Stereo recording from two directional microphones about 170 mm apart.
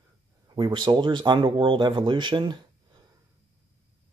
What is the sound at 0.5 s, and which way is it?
Speech, 25° right (ahead or behind).